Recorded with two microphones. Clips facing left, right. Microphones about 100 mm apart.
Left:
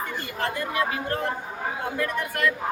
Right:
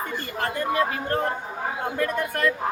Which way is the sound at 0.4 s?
35° right (ahead or behind).